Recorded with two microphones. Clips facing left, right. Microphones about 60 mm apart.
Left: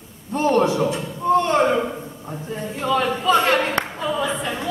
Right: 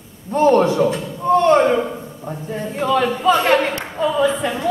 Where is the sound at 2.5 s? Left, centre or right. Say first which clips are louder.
Right 3 dB; right.